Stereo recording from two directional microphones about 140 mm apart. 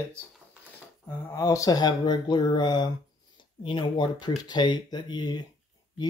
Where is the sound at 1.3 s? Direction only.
25° left (ahead or behind).